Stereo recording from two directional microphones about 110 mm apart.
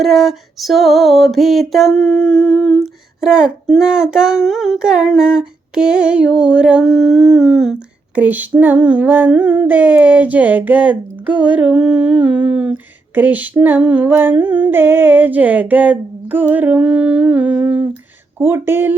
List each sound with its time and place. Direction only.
0.0 s music: centre (ahead or behind)
8.2 s a sound: 15° right (ahead or behind)
18.3 s speech: 20° right (ahead or behind)